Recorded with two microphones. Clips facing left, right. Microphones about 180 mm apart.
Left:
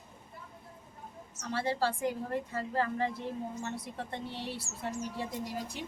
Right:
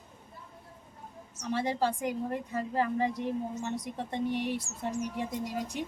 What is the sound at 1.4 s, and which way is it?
A woman's voice, 15° right (ahead or behind).